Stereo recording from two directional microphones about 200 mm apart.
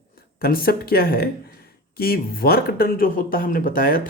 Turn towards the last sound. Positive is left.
turn(degrees=45)  # may be behind; listen again after turning